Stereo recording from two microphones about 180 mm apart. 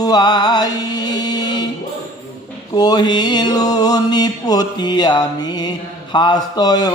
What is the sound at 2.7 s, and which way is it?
Mantra, 25° left (ahead or behind).